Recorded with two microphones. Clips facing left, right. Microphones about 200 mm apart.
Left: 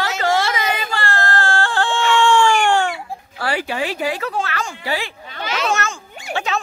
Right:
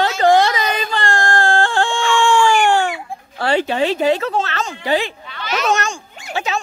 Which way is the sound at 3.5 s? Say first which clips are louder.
Right 6 dB; 25° right (ahead or behind).